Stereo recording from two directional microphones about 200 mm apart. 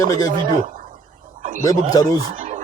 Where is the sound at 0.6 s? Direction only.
40° right (ahead or behind).